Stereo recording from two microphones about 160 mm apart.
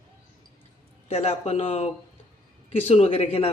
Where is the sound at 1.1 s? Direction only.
40° left (ahead or behind).